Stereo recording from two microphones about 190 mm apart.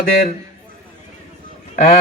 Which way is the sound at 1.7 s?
45° left (ahead or behind).